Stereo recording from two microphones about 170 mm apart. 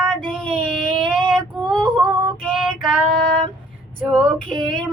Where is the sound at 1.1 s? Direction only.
Centre (ahead or behind).